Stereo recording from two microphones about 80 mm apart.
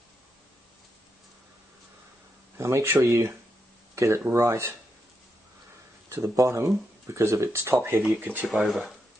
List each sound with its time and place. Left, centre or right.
2.5 s speech: right
3.9 s a sound: right
4.3 s speech: right
6.0 s speech: right
8.5 s speech: centre